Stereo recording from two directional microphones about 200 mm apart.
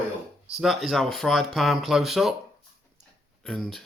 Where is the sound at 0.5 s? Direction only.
Centre (ahead or behind).